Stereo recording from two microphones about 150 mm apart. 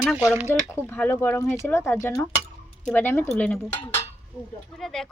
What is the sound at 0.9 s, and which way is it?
Speech, 15° left (ahead or behind).